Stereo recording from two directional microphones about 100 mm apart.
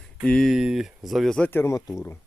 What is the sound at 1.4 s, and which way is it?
Speech, 20° left (ahead or behind).